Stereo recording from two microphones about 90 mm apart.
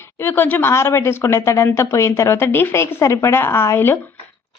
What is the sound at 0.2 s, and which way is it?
A woman's voice, 25° left (ahead or behind).